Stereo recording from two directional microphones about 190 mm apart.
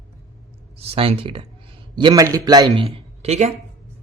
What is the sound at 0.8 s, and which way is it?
A man's voice, 30° right (ahead or behind).